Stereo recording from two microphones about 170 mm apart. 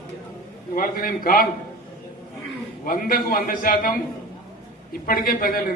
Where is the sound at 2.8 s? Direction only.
55° left (ahead or behind).